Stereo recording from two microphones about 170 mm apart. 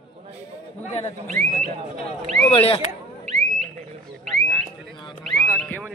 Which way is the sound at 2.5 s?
35° left (ahead or behind).